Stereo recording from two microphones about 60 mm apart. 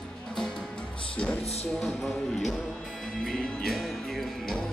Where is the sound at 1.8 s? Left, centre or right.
Centre.